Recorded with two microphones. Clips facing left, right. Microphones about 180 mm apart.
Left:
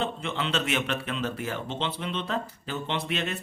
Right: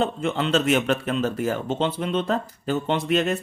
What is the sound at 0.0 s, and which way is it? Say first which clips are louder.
Speech: right 7 dB; 45° right (ahead or behind).